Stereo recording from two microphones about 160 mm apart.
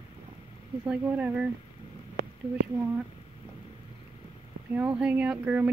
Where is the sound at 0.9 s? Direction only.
5° right (ahead or behind).